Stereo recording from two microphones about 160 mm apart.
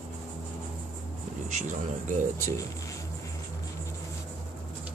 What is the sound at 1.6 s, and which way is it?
Speech, 50° right (ahead or behind).